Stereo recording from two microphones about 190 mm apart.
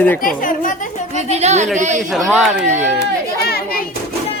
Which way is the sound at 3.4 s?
55° left (ahead or behind).